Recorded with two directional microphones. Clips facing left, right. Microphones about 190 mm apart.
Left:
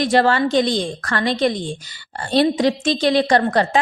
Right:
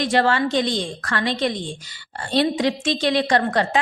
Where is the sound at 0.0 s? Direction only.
40° left (ahead or behind).